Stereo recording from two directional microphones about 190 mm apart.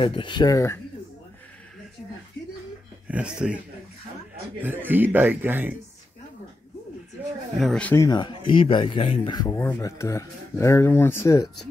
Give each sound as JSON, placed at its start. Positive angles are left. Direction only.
{"t": 0.0, "sound": "speech", "side_deg": 25}
{"t": 3.1, "sound": "speech", "side_deg": -5}
{"t": 7.6, "sound": "speech", "side_deg": 5}